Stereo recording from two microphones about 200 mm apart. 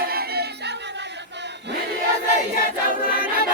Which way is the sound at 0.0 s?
50° right (ahead or behind).